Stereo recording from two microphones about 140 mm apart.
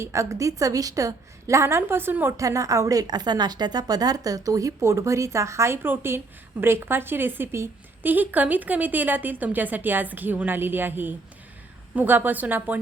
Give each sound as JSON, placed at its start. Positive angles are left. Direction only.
{"t": 0.0, "sound": "a woman's voice", "side_deg": -20}